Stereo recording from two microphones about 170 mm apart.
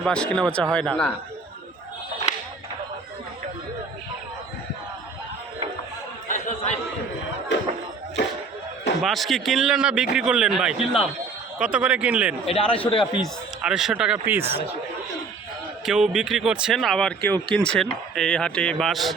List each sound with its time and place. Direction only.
0.0 s speech: 5° left (ahead or behind)
6.2 s chatter: 45° left (ahead or behind)
9.0 s speech: centre (ahead or behind)
12.5 s a man's voice: 30° left (ahead or behind)
13.2 s speech: 5° right (ahead or behind)
15.9 s speech: 5° right (ahead or behind)